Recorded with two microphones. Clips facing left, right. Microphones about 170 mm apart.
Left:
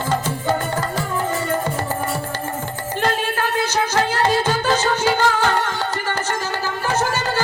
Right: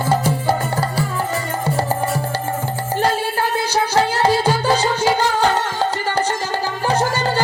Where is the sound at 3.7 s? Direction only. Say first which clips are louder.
Right 4 dB; 10° right (ahead or behind).